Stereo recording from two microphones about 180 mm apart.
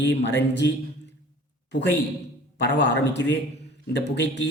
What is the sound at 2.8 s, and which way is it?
A man's voice, 70° left (ahead or behind).